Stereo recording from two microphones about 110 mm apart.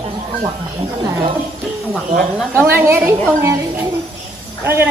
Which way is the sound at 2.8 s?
25° right (ahead or behind).